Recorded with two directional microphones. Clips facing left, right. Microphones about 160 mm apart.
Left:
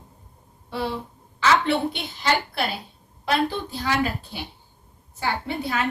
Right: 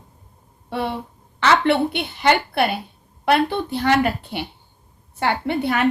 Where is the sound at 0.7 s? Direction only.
60° right (ahead or behind).